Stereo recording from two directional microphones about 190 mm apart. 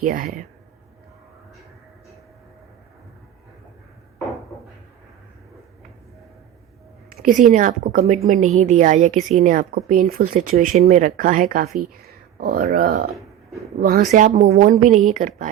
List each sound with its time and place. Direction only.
0.0 s speech: 50° right (ahead or behind)
7.1 s a sound: 50° right (ahead or behind)
7.5 s a woman's voice: 45° right (ahead or behind)